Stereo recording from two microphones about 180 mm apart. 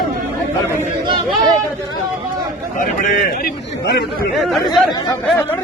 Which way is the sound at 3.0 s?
45° left (ahead or behind).